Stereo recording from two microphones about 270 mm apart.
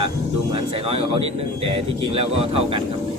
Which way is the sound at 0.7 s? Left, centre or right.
Right.